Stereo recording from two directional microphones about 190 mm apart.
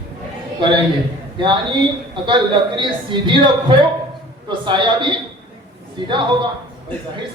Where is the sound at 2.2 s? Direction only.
25° right (ahead or behind).